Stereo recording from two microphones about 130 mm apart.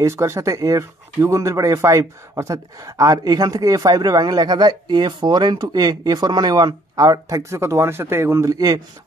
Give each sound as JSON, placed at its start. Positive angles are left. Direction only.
{"t": 0.0, "sound": "speech", "side_deg": -20}